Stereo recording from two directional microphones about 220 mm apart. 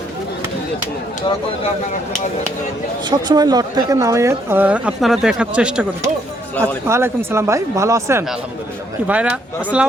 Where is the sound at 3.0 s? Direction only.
20° right (ahead or behind).